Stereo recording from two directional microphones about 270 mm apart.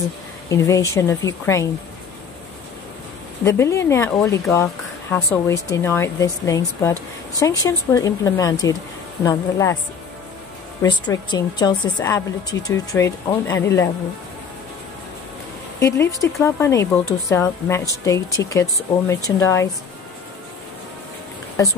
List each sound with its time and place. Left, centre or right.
0.5 s speech: centre
3.4 s speech: centre
10.8 s speech: centre
16.2 s speech: centre